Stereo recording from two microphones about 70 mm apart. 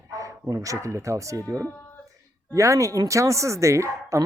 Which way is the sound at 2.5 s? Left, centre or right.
Right.